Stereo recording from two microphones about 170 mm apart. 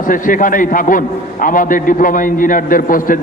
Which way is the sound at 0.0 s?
50° left (ahead or behind).